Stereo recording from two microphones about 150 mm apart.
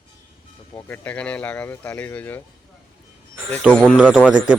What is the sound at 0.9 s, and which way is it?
Speech, 10° left (ahead or behind).